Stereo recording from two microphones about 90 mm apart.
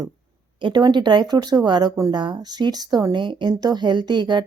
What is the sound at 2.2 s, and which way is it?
Speech, 55° right (ahead or behind).